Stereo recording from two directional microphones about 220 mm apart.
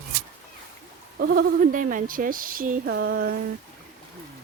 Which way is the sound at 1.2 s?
40° right (ahead or behind).